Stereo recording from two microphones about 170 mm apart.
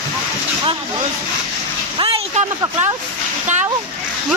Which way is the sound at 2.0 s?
30° right (ahead or behind).